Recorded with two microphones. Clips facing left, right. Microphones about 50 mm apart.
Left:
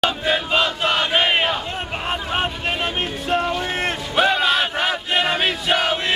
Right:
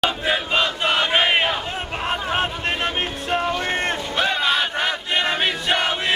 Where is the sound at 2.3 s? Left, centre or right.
Centre.